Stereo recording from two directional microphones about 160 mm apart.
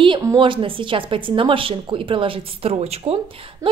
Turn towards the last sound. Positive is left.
turn(degrees=-40)  # may be behind; listen again after turning